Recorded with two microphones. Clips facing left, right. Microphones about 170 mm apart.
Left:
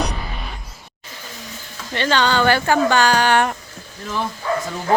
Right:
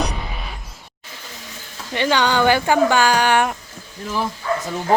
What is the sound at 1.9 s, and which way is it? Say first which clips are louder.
Speech: even; 15° right (ahead or behind).